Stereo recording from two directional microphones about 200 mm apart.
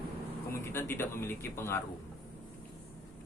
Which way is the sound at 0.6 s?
10° left (ahead or behind).